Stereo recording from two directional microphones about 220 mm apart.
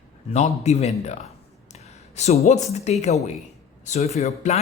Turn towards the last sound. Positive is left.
turn(degrees=30)  # may be behind; listen again after turning